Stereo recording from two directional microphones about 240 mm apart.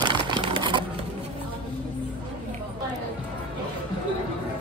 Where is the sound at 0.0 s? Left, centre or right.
Centre.